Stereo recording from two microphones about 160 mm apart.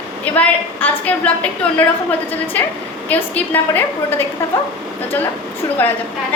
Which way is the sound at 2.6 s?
10° left (ahead or behind).